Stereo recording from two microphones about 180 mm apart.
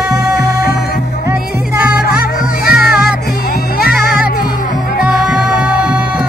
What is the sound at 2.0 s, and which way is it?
Music, 55° left (ahead or behind).